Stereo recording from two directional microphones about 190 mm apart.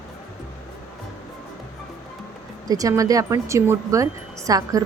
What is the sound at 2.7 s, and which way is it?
Speech, 20° right (ahead or behind).